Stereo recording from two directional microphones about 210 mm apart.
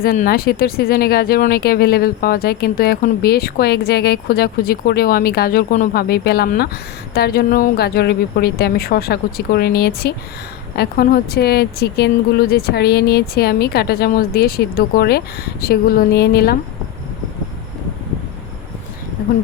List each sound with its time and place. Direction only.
0.0 s speech: 45° left (ahead or behind)